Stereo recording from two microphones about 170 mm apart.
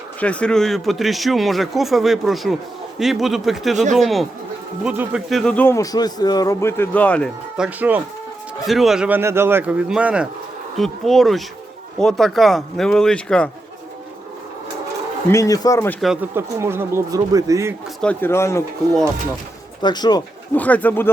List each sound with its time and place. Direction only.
0.2 s a man's voice: 5° left (ahead or behind)
7.5 s speech: 5° right (ahead or behind)
15.3 s a man's voice: 20° left (ahead or behind)
16.3 s speech: 15° right (ahead or behind)
18.0 s a man's voice: 10° left (ahead or behind)
19.8 s speech: 25° left (ahead or behind)
20.6 s a man's voice: 10° left (ahead or behind)